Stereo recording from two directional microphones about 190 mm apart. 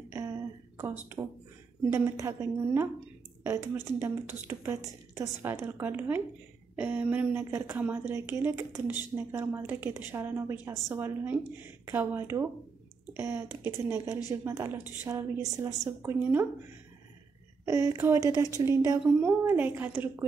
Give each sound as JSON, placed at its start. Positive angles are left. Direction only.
{"t": 0.1, "sound": "a sound", "side_deg": -15}
{"t": 1.9, "sound": "speech", "side_deg": -15}
{"t": 17.6, "sound": "speech", "side_deg": -15}